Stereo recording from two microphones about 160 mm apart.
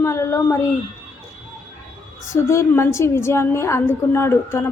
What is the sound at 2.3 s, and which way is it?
A woman's voice, 15° left (ahead or behind).